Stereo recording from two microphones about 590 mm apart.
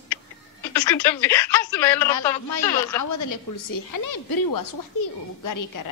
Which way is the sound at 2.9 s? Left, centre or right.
Left.